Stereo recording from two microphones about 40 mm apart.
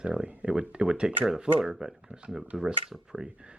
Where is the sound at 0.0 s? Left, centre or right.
Right.